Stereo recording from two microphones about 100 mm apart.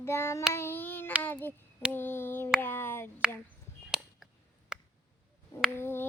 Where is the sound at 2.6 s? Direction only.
20° left (ahead or behind).